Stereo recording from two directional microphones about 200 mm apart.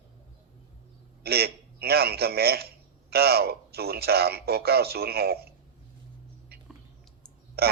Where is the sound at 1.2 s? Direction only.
50° right (ahead or behind).